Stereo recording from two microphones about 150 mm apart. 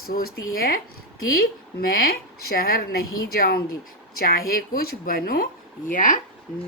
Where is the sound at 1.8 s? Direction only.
85° left.